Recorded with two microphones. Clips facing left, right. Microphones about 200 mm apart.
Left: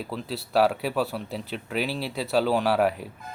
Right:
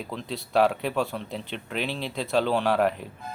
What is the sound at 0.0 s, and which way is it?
Speech, 5° left (ahead or behind).